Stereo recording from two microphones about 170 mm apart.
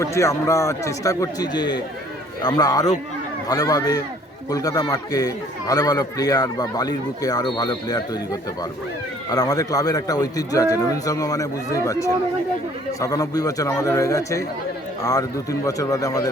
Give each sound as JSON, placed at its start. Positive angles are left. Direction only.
{"t": 0.0, "sound": "a man's voice", "side_deg": 15}
{"t": 9.3, "sound": "a man's voice", "side_deg": 20}
{"t": 15.6, "sound": "a man's voice", "side_deg": 20}